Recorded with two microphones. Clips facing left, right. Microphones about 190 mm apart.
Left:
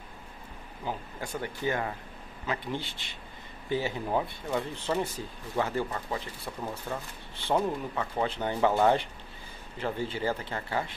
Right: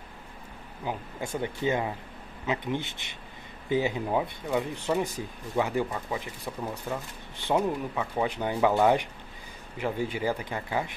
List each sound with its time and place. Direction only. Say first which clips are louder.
0.8 s speech: right 2 dB; 20° right (ahead or behind)